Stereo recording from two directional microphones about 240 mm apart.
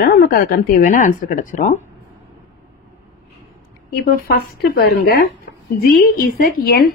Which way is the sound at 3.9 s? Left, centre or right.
Left.